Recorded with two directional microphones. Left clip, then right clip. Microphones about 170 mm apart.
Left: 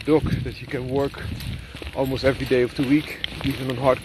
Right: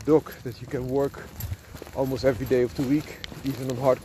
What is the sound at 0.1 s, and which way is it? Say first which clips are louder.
Speech: left 1 dB; 40° right (ahead or behind).